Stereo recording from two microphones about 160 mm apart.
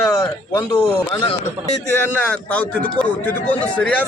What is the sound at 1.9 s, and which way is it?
A man's voice, 10° left (ahead or behind).